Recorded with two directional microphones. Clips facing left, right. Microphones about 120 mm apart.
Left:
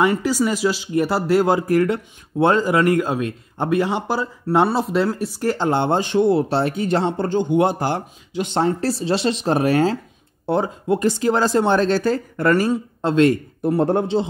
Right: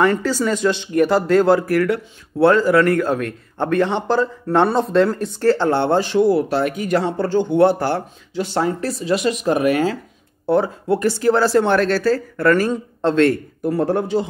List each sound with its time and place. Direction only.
0.0 s speech: 10° left (ahead or behind); by 9.9 s 30° left (ahead or behind)
10.4 s speech: 20° left (ahead or behind)